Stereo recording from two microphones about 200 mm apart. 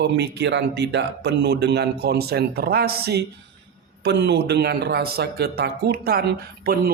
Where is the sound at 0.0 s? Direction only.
55° right (ahead or behind).